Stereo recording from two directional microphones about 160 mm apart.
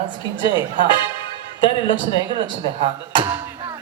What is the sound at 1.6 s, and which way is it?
Speech, 30° left (ahead or behind).